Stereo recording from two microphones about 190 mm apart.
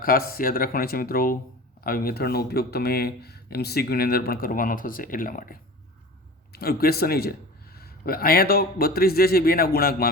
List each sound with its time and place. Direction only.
0.0 s speech: 50° left (ahead or behind)